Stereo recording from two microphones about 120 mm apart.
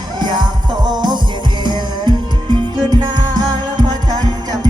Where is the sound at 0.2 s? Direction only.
35° right (ahead or behind).